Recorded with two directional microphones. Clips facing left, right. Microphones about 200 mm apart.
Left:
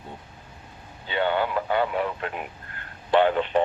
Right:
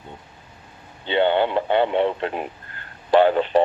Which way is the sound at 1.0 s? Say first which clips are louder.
Right 6 dB; 25° right (ahead or behind).